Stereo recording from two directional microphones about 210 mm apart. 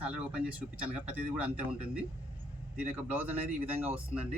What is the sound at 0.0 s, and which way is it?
Speech, 5° right (ahead or behind).